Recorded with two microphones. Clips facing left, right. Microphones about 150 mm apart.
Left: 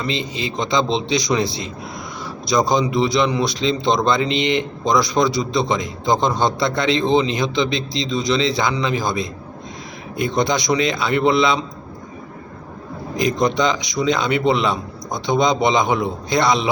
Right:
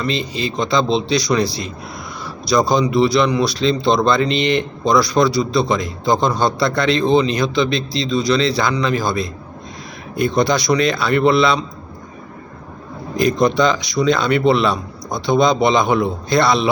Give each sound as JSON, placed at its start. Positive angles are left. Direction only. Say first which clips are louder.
{"t": 0.0, "sound": "a man's voice", "louder": "right 3 dB", "side_deg": 20}
{"t": 13.1, "sound": "a man's voice", "louder": "right 3 dB", "side_deg": 20}